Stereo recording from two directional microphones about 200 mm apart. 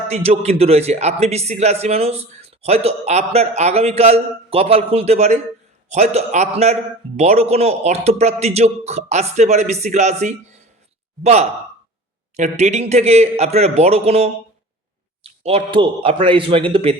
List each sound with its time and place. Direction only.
0.1 s a man's voice: 30° right (ahead or behind)